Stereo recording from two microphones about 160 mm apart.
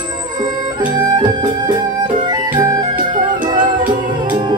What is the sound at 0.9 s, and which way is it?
Music, 25° right (ahead or behind).